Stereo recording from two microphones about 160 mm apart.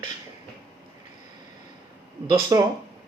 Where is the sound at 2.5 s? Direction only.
20° right (ahead or behind).